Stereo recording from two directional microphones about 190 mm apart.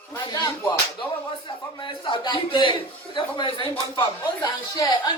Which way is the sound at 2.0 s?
25° left (ahead or behind).